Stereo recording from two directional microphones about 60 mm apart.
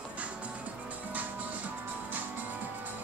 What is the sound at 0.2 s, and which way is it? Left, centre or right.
Music, right.